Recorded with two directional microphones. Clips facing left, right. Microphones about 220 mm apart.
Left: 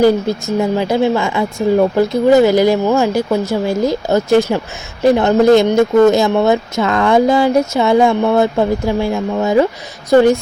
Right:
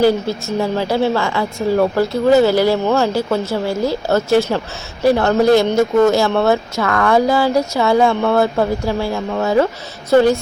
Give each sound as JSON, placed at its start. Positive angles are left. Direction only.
{"t": 0.0, "sound": "speech", "side_deg": 15}